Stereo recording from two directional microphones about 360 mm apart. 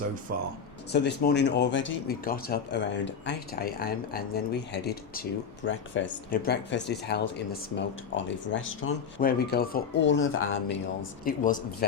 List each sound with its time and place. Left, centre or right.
0.3 s speech: right
0.9 s speech: left
11.3 s speech: left